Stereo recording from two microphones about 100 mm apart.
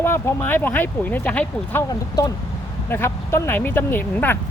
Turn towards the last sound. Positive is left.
turn(degrees=20)  # may be behind; listen again after turning